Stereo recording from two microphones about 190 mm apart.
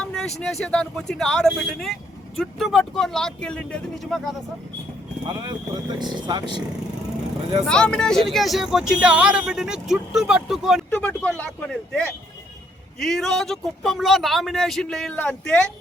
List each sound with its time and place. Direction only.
0.0 s speech: 5° left (ahead or behind)
5.3 s speech: 20° right (ahead or behind)
7.7 s speech: 5° left (ahead or behind)